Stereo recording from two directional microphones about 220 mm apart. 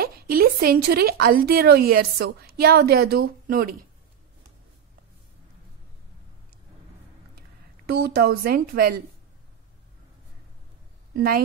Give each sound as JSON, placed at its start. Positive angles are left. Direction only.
{"t": 0.0, "sound": "a woman's voice", "side_deg": -45}
{"t": 7.8, "sound": "a woman's voice", "side_deg": -45}
{"t": 11.1, "sound": "a woman's voice", "side_deg": -40}